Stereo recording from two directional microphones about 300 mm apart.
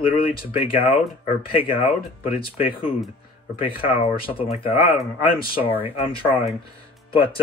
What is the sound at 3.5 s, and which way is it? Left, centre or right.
Speech, centre.